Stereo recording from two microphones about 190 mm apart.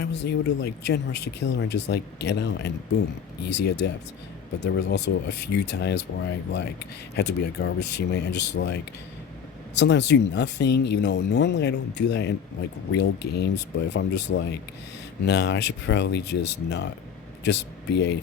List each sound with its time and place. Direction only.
0.0 s speech: 60° left (ahead or behind)